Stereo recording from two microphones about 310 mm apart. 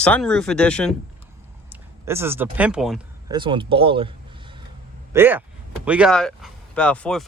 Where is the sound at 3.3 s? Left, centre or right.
Centre.